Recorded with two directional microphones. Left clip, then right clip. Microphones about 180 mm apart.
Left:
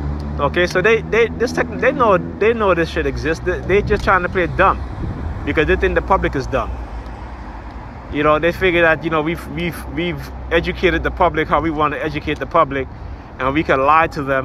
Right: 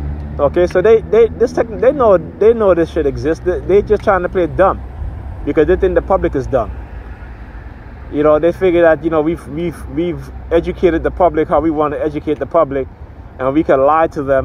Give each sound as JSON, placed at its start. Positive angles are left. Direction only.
{"t": 0.4, "sound": "speech", "side_deg": -55}
{"t": 8.1, "sound": "speech", "side_deg": -55}